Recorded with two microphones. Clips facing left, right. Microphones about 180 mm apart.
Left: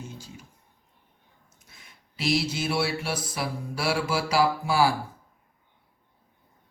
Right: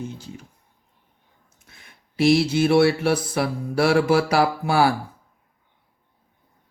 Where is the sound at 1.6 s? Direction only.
55° right (ahead or behind).